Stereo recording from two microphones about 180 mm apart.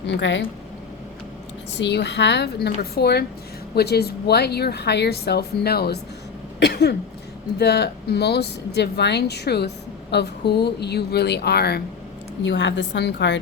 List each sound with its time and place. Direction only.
0.1 s a woman's voice: 85° left
1.8 s speech: 70° left (ahead or behind)
12.4 s a woman's voice: 85° left